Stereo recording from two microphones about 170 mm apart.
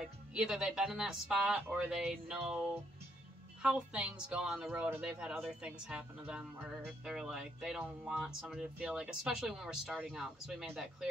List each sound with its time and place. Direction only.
0.0 s a woman's voice: 5° right (ahead or behind)